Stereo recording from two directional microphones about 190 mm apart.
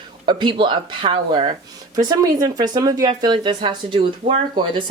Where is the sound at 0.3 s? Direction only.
25° right (ahead or behind).